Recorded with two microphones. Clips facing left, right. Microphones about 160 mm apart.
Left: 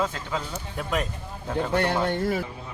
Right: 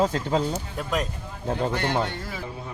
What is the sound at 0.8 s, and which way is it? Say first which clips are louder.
Speech: left 1 dB; 5° left (ahead or behind).